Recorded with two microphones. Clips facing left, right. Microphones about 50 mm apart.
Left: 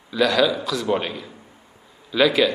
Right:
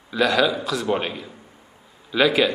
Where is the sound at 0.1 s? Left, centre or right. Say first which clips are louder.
Left 1 dB; centre.